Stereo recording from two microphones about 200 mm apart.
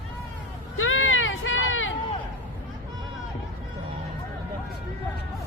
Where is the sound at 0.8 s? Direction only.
85° left.